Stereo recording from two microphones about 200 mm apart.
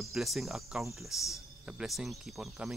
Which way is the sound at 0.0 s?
Centre (ahead or behind).